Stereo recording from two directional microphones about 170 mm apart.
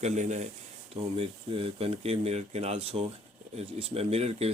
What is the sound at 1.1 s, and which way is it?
Speech, 35° right (ahead or behind).